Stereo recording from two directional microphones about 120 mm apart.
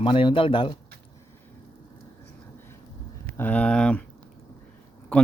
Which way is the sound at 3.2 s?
10° left (ahead or behind).